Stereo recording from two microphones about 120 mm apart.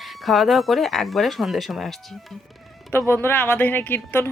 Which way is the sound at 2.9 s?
20° left (ahead or behind).